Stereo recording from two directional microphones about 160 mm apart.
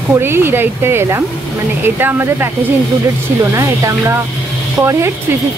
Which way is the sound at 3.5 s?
20° right (ahead or behind).